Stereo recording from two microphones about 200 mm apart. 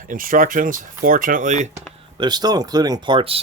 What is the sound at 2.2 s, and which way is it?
Speech, 20° right (ahead or behind).